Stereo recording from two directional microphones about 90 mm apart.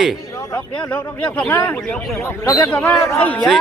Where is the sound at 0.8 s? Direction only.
20° left (ahead or behind).